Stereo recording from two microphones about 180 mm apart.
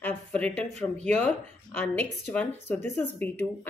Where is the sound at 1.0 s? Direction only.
10° left (ahead or behind).